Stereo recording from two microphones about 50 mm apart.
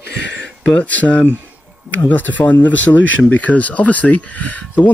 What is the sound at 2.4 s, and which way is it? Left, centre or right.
Speech, left.